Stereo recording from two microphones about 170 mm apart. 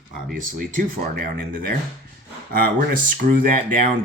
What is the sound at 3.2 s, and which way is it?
Speech, 50° right (ahead or behind).